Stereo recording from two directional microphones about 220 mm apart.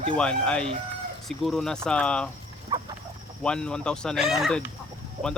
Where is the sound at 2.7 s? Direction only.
20° right (ahead or behind).